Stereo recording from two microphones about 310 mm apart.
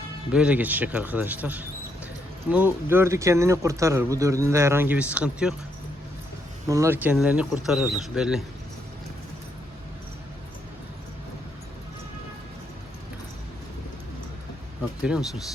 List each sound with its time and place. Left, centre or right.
0.3 s speech: centre
6.7 s speech: centre
15.0 s speech: centre